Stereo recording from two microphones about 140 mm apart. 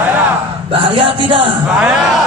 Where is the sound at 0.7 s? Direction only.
40° right (ahead or behind).